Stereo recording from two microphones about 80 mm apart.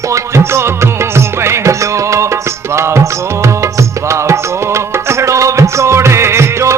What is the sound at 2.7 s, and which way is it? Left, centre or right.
Music, right.